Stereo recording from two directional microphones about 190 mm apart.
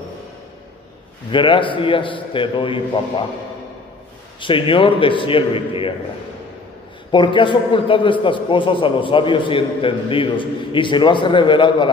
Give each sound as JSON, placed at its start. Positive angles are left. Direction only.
{"t": 1.3, "sound": "a man's voice", "side_deg": 25}
{"t": 4.4, "sound": "a man's voice", "side_deg": 25}
{"t": 7.1, "sound": "a man's voice", "side_deg": 25}